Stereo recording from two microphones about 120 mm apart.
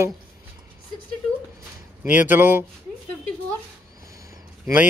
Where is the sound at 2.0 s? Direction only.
15° right (ahead or behind).